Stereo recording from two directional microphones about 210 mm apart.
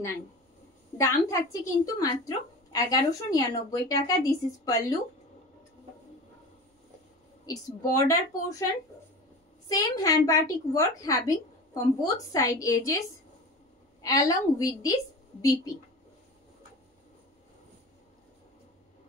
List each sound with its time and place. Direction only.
0.9 s speech: 15° left (ahead or behind)
7.4 s speech: 15° left (ahead or behind)
9.7 s a woman's voice: 15° left (ahead or behind)
14.0 s speech: 15° left (ahead or behind)